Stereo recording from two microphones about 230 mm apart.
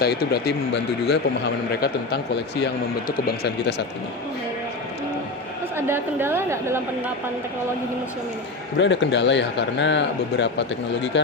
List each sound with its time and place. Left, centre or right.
0.0 s a man's voice: left
5.7 s a woman's voice: centre
8.8 s a man's voice: left